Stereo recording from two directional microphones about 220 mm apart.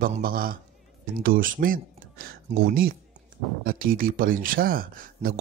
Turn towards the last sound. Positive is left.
turn(degrees=-40)  # may be behind; listen again after turning